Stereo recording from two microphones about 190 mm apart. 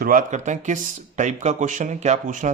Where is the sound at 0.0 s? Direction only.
45° right (ahead or behind).